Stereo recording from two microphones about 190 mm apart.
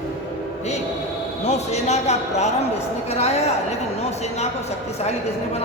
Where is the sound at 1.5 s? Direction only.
35° left (ahead or behind).